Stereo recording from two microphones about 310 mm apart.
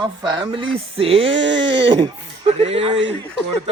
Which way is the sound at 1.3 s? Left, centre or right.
Right.